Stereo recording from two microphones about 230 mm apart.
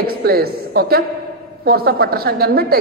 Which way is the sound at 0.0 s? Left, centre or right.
Right.